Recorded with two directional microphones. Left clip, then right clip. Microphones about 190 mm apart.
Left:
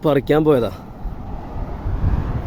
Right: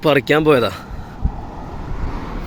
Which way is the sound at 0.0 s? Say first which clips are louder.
Right 2 dB; 15° left (ahead or behind).